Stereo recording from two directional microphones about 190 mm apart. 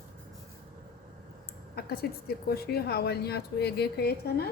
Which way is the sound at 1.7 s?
55° left (ahead or behind).